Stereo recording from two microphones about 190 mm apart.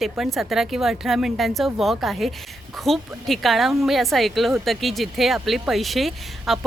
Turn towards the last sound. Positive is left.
turn(degrees=0)  # may be behind; listen again after turning